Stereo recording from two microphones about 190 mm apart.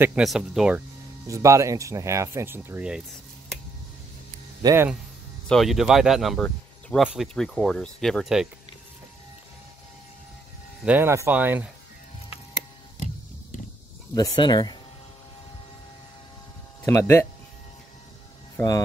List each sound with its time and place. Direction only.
0.0 s speech: 5° right (ahead or behind)
1.2 s speech: 15° right (ahead or behind)
4.6 s speech: 10° right (ahead or behind)
5.5 s speech: centre (ahead or behind)
10.8 s speech: 10° right (ahead or behind)
14.1 s speech: 20° left (ahead or behind)
16.8 s speech: 15° left (ahead or behind)